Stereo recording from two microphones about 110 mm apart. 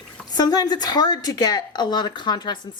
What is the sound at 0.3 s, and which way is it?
A woman's voice, 35° left (ahead or behind).